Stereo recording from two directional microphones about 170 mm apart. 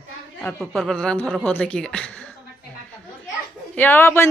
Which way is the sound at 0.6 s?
Centre (ahead or behind).